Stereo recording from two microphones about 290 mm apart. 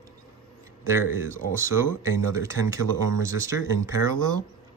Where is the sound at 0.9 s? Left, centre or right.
Centre.